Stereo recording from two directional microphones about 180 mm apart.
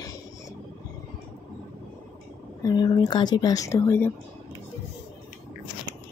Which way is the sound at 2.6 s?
25° left (ahead or behind).